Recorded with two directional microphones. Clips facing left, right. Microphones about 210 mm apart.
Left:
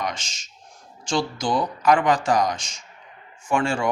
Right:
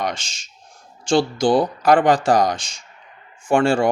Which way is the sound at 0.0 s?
30° right (ahead or behind).